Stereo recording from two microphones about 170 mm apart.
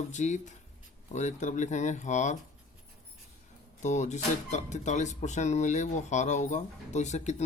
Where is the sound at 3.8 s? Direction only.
45° left (ahead or behind).